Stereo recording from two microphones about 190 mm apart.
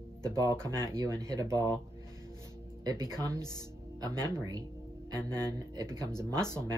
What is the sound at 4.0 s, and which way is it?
Speech, 20° right (ahead or behind).